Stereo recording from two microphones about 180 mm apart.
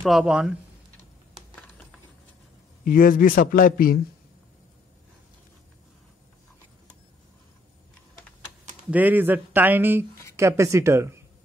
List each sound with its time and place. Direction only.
0.0 s speech: 5° right (ahead or behind)
2.8 s a man's voice: 50° left (ahead or behind)
8.9 s speech: 10° right (ahead or behind)